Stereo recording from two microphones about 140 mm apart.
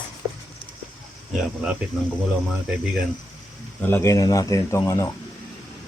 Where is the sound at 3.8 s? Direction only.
15° left (ahead or behind).